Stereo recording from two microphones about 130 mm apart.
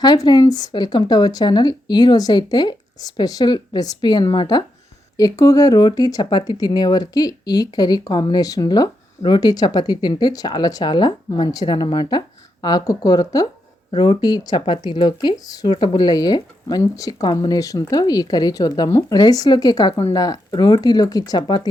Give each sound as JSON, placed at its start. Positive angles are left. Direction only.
{"t": 0.0, "sound": "speech", "side_deg": 30}